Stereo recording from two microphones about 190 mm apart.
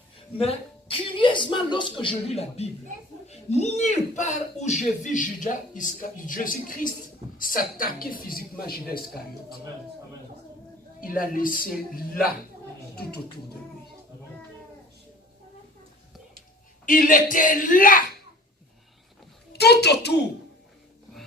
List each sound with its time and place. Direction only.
0.3 s speech: 30° left (ahead or behind); by 9.6 s 50° left (ahead or behind)
11.0 s a child's voice: 50° left (ahead or behind)
16.8 s speech: 45° left (ahead or behind)
19.5 s a child's voice: 60° left (ahead or behind)